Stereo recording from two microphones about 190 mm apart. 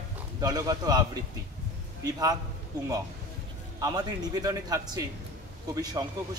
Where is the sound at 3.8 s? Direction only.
20° right (ahead or behind).